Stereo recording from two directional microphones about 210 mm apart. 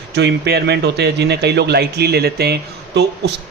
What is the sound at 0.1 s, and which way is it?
Speech, 55° right (ahead or behind).